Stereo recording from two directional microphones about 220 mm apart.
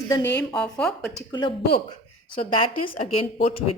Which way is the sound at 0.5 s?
5° left (ahead or behind).